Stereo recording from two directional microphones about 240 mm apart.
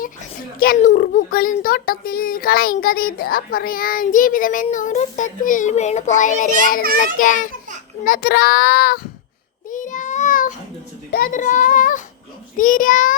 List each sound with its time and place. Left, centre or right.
0.0 s a child's voice: left